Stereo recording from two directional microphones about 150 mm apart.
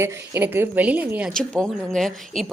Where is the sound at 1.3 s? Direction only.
5° left (ahead or behind).